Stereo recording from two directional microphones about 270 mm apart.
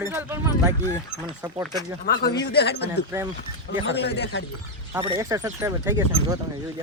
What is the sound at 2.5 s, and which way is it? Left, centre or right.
Speech, left.